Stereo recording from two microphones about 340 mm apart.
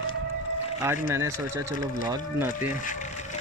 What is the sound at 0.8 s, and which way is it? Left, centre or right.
Speech, centre.